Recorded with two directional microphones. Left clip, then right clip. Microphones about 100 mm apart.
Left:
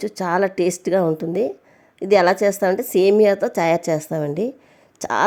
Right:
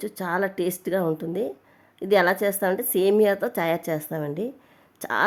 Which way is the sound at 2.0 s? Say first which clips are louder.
Left 5 dB; 35° left (ahead or behind).